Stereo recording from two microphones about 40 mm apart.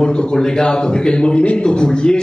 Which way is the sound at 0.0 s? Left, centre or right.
Centre.